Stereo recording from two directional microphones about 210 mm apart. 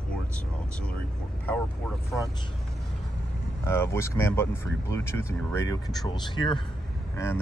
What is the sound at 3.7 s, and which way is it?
Speech, 10° left (ahead or behind).